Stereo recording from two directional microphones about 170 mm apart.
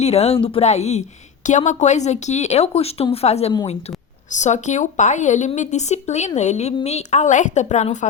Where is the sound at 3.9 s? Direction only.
35° left (ahead or behind).